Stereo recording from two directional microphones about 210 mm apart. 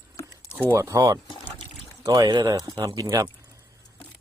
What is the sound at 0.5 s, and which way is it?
Speech, 10° right (ahead or behind).